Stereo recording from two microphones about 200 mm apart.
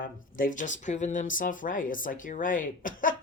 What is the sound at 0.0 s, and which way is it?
Speech, 45° left (ahead or behind).